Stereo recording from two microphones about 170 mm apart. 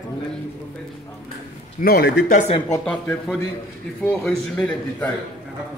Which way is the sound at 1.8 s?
65° left (ahead or behind).